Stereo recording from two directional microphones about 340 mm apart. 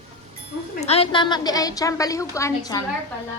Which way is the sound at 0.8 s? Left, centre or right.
Centre.